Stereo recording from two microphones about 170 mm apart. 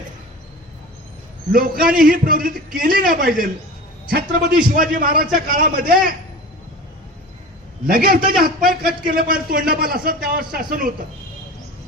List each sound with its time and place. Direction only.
1.5 s a man's voice: 60° right (ahead or behind)
7.9 s a man's voice: 60° right (ahead or behind)